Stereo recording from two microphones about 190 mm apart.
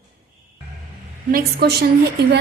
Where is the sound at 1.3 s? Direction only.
60° right (ahead or behind).